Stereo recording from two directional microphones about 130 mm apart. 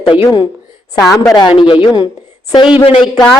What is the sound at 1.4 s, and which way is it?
A man's voice, 35° left (ahead or behind).